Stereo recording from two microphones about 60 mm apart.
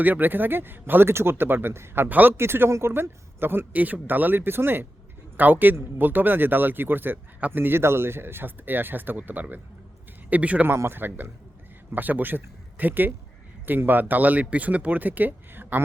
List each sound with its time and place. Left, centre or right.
0.0 s speech: right
2.0 s speech: right
2.3 s speech: right
10.8 s speech: right